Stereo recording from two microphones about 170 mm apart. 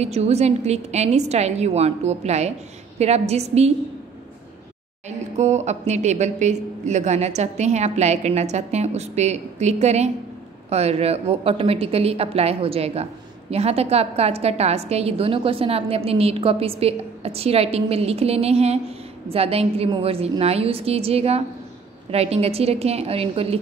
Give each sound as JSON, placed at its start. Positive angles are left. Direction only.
{"t": 0.0, "sound": "a woman's voice", "side_deg": -40}
{"t": 5.4, "sound": "a woman's voice", "side_deg": -40}